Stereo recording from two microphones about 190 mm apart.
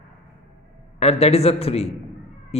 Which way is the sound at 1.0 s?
35° left (ahead or behind).